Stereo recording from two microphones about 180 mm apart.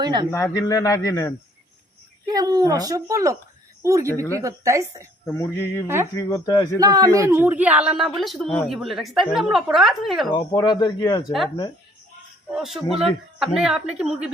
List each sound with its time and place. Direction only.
0.0 s a man's voice: 25° right (ahead or behind)
0.3 s a man's voice: 15° left (ahead or behind)
2.2 s a woman's voice: 20° right (ahead or behind)
5.2 s a man's voice: 15° left (ahead or behind)
6.7 s speech: 20° right (ahead or behind); by 10.3 s centre (ahead or behind)
10.3 s a man's voice: 20° left (ahead or behind)
12.5 s speech: centre (ahead or behind)